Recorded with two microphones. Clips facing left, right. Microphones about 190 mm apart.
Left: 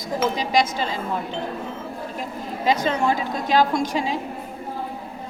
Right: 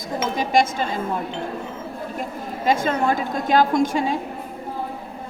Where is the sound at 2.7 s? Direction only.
50° right (ahead or behind).